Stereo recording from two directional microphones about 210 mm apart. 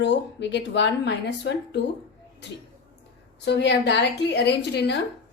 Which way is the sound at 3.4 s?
55° left (ahead or behind).